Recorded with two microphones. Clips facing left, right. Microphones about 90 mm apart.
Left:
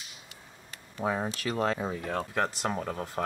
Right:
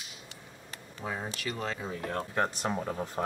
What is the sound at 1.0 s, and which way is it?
Speech, 50° left (ahead or behind).